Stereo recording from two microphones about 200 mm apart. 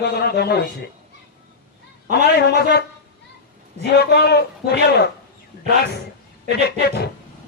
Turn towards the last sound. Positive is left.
turn(degrees=55)  # may be behind; listen again after turning